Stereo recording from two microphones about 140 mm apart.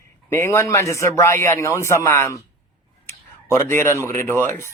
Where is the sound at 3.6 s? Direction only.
20° left (ahead or behind).